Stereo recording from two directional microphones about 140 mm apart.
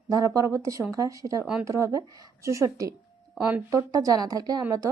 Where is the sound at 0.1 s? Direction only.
25° right (ahead or behind).